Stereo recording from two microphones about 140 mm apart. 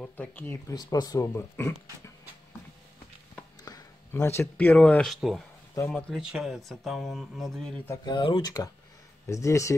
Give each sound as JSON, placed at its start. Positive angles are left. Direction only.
{"t": 0.4, "sound": "speech", "side_deg": 15}
{"t": 0.7, "sound": "speech", "side_deg": 25}
{"t": 3.6, "sound": "speech", "side_deg": 25}
{"t": 8.0, "sound": "speech", "side_deg": 35}